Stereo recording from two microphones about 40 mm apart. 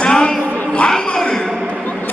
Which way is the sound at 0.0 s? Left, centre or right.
Left.